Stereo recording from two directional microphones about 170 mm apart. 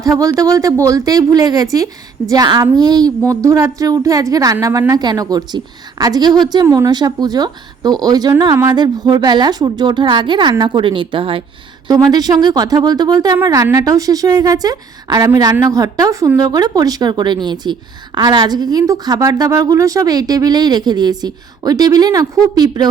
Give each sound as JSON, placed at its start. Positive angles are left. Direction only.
{"t": 0.0, "sound": "a woman's voice", "side_deg": -20}